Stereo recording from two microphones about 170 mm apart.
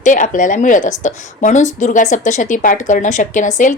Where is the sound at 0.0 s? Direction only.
50° left (ahead or behind).